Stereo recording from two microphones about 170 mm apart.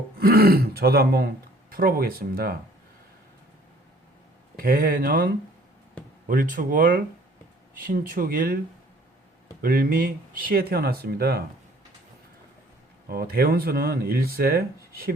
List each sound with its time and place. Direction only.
0.2 s speech: 65° right (ahead or behind)
4.5 s speech: 55° right (ahead or behind)
9.6 s speech: 60° right (ahead or behind)
13.1 s speech: 65° right (ahead or behind)